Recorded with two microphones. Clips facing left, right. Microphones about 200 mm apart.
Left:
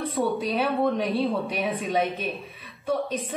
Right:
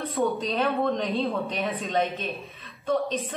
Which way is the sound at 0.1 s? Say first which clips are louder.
Right 1 dB; 10° left (ahead or behind).